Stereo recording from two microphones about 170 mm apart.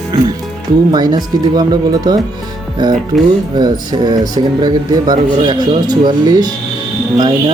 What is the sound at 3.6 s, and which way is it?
Speech, 25° right (ahead or behind).